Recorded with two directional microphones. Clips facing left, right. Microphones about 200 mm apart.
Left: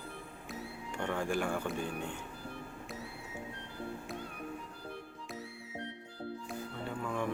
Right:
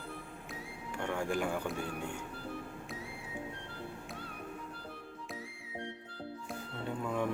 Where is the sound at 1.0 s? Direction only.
15° right (ahead or behind).